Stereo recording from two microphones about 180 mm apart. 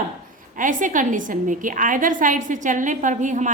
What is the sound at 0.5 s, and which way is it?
A woman's voice, 45° right (ahead or behind).